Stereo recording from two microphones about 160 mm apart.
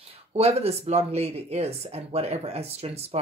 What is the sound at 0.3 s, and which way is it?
Speech, 40° right (ahead or behind).